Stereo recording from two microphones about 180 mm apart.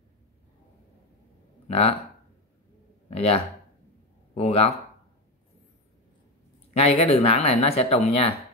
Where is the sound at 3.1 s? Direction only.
35° left (ahead or behind).